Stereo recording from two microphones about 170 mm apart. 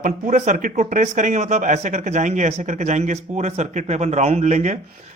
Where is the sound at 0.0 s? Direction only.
50° right (ahead or behind).